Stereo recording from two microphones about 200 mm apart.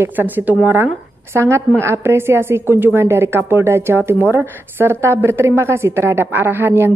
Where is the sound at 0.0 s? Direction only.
10° right (ahead or behind).